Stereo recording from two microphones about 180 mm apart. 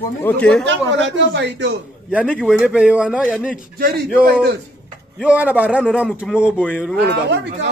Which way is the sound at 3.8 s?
55° right (ahead or behind).